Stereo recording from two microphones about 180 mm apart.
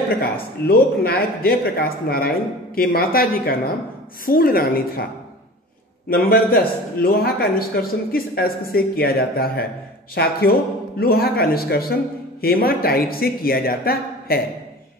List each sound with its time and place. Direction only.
0.2 s a man's voice: 60° left (ahead or behind)
6.0 s a man's voice: 55° left (ahead or behind)